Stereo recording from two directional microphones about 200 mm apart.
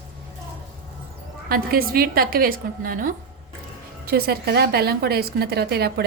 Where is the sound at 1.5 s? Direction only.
50° right (ahead or behind).